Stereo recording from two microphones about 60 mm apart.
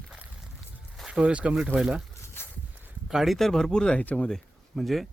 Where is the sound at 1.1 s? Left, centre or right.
Centre.